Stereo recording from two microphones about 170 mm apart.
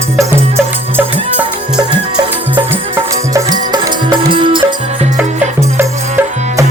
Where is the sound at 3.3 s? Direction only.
25° right (ahead or behind).